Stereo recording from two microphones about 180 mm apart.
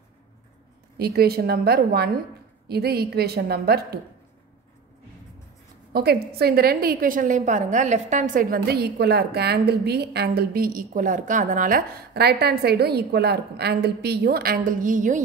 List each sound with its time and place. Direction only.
0.9 s a woman's voice: 60° right (ahead or behind)
5.9 s a woman's voice: 60° right (ahead or behind); by 15.2 s 45° right (ahead or behind)